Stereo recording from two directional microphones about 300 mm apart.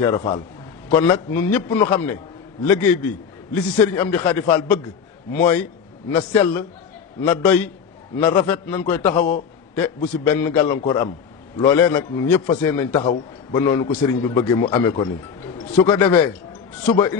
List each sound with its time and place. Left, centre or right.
0.0 s a man's voice: centre